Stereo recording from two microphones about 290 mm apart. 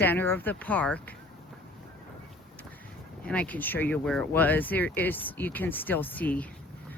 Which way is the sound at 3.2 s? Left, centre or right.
Centre.